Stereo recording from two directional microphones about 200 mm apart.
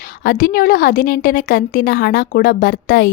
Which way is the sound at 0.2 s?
45° left (ahead or behind).